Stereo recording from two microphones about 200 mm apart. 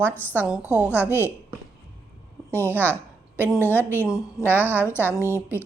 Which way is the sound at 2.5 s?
10° left (ahead or behind).